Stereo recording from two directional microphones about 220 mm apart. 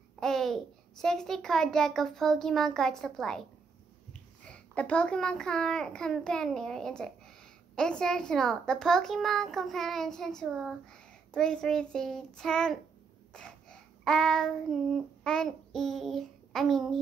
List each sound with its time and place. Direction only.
0.2 s a child's voice: centre (ahead or behind)
13.3 s child singing: 5° left (ahead or behind)